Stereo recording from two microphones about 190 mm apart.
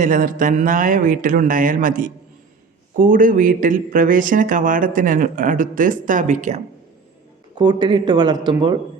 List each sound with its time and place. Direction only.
0.0 s speech: 45° right (ahead or behind)
7.5 s speech: 20° right (ahead or behind)